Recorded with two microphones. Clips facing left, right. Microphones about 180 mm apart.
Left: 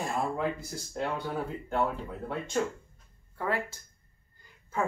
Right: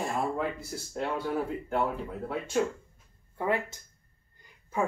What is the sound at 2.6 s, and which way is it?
Speech, 5° right (ahead or behind).